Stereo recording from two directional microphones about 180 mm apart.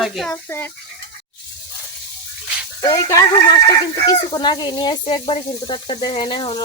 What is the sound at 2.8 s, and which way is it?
Speech, 20° left (ahead or behind).